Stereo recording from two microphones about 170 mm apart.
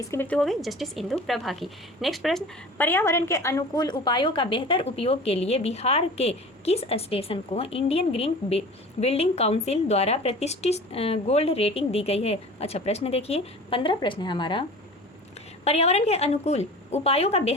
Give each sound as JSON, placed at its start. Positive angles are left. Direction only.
{"t": 0.0, "sound": "speech", "side_deg": 15}
{"t": 2.7, "sound": "a woman's voice", "side_deg": 10}
{"t": 15.6, "sound": "a woman's voice", "side_deg": 40}